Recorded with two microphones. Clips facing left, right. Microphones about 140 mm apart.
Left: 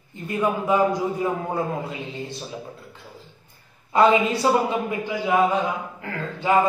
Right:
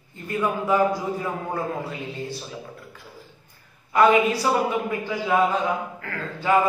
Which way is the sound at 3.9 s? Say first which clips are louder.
Even; 25° left (ahead or behind).